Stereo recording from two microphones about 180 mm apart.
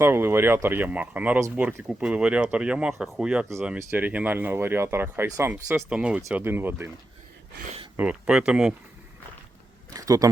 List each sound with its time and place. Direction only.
0.0 s speech: 10° right (ahead or behind)
7.9 s speech: 5° right (ahead or behind)
9.9 s a sound: 20° right (ahead or behind)